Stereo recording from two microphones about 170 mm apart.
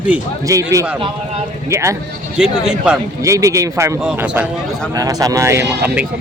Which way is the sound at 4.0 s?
5° right (ahead or behind).